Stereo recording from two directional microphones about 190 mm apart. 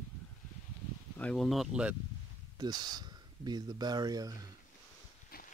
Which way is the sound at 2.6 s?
20° right (ahead or behind).